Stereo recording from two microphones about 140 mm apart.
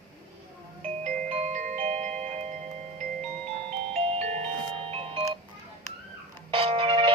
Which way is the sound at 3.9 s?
50° right (ahead or behind).